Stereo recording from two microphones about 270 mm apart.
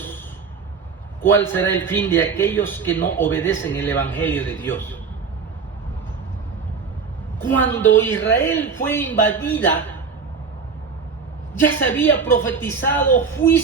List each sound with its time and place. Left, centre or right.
1.2 s speech: centre
7.4 s speech: centre
11.5 s speech: centre